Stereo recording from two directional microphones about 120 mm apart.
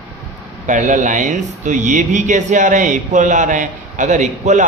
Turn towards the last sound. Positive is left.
turn(degrees=-85)